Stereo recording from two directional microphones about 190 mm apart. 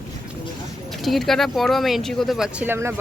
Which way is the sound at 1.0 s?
Centre (ahead or behind).